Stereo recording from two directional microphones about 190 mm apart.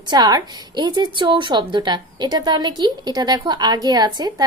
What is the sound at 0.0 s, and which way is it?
A woman's voice, 20° right (ahead or behind).